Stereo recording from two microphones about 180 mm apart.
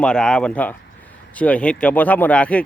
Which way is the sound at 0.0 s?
5° left (ahead or behind).